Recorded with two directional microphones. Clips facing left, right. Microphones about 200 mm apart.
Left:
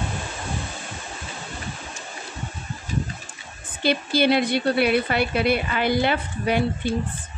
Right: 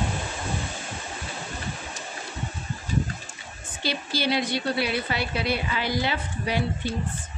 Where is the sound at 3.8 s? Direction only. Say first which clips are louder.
Left 8 dB; 55° left (ahead or behind).